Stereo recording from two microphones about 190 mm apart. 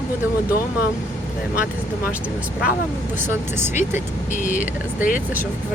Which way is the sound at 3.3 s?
10° right (ahead or behind).